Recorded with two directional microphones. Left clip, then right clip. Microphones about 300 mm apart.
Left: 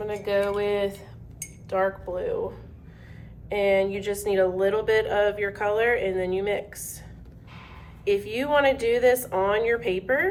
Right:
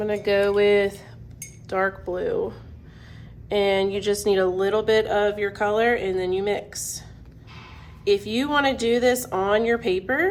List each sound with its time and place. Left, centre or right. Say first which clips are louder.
0.0 s speech: right 4 dB; centre
3.5 s speech: right 1 dB; centre
8.0 s speech: right 3 dB; centre